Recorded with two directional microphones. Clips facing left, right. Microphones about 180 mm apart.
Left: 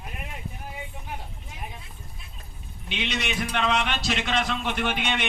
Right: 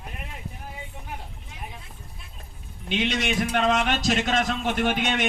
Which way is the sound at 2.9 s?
45° right (ahead or behind).